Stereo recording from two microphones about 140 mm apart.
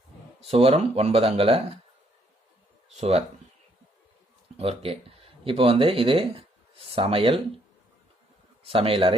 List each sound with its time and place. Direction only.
0.4 s speech: 45° right (ahead or behind)
3.0 s speech: 45° right (ahead or behind)
4.5 s a man's voice: 45° right (ahead or behind)
8.6 s a man's voice: 40° right (ahead or behind)